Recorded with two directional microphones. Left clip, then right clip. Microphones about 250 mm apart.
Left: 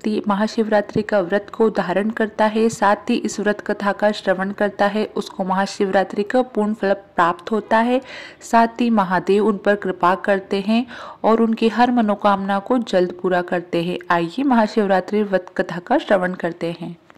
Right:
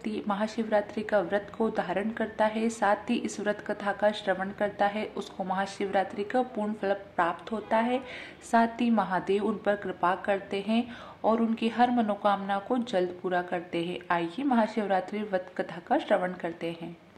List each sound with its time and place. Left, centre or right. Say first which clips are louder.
0.0 s a woman's voice: left 10 dB; left